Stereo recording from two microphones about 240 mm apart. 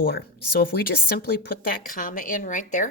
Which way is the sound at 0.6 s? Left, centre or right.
Left.